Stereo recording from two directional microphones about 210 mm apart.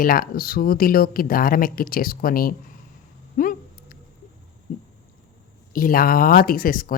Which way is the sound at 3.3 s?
40° left (ahead or behind).